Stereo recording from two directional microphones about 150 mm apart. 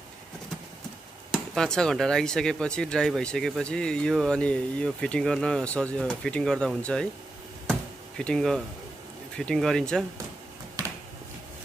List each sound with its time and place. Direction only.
1.3 s speech: centre (ahead or behind)
8.2 s speech: 5° left (ahead or behind)